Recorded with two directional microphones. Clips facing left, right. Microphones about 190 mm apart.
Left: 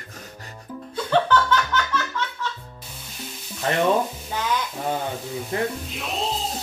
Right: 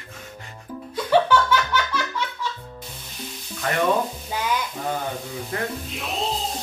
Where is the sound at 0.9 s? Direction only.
10° right (ahead or behind).